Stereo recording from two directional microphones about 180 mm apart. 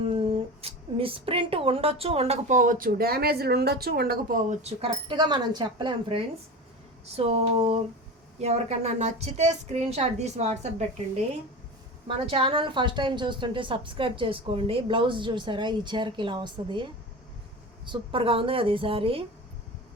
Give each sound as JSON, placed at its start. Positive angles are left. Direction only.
{"t": 0.1, "sound": "speech", "side_deg": -30}
{"t": 12.0, "sound": "a woman's voice", "side_deg": -30}